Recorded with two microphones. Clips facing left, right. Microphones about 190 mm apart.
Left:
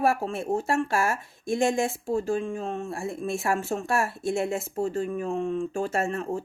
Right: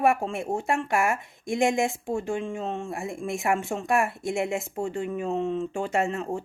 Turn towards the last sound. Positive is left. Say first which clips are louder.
# right 1 dB
turn(degrees=-20)  # may be behind; listen again after turning